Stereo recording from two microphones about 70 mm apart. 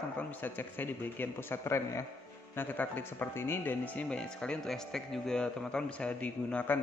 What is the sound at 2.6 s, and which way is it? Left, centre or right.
A man's voice, left.